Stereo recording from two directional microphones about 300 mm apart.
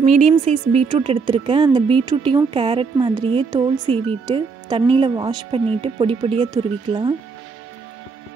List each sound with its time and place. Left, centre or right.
0.0 s speech: right